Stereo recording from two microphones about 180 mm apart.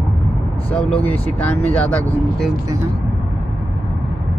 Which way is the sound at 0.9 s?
35° left (ahead or behind).